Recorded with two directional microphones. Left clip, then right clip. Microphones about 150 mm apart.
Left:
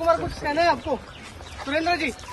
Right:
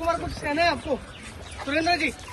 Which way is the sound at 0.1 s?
50° left (ahead or behind).